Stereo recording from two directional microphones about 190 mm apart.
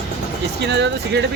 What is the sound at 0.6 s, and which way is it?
Speech, 65° right (ahead or behind).